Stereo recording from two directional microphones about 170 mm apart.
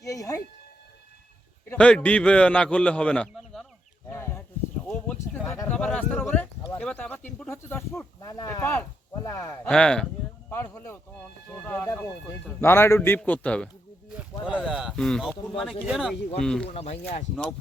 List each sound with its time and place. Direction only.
0.0 s speech: 20° left (ahead or behind)
1.7 s a man's voice: 5° left (ahead or behind)
4.1 s a sound: 15° left (ahead or behind)
6.7 s a man's voice: 5° left (ahead or behind)
8.2 s a man's voice: 20° left (ahead or behind)
9.6 s a man's voice: 5° left (ahead or behind)
14.4 s a man's voice: 5° right (ahead or behind)
16.6 s speech: 40° left (ahead or behind)